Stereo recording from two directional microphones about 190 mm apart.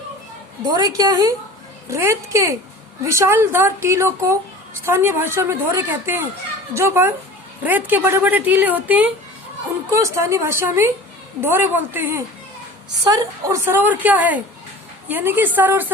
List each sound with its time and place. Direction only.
0.6 s a woman's voice: 20° right (ahead or behind)